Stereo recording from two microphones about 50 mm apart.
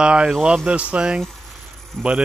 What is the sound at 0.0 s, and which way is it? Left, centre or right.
Speech, right.